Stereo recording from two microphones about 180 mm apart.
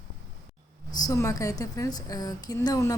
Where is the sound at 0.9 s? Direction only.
20° left (ahead or behind).